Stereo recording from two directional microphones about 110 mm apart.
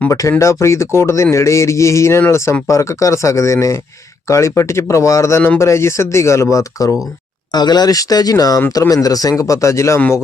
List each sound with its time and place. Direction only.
0.1 s a man's voice: 30° left (ahead or behind)